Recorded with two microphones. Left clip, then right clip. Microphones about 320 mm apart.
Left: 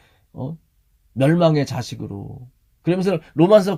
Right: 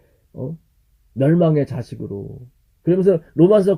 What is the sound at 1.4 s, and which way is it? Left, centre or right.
Speech, centre.